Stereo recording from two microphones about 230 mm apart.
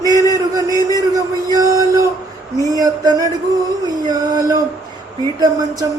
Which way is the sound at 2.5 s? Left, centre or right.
Centre.